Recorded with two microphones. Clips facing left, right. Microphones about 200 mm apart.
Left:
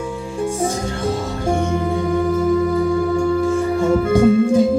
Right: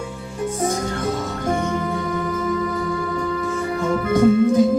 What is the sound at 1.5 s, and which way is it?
Music, 30° left (ahead or behind).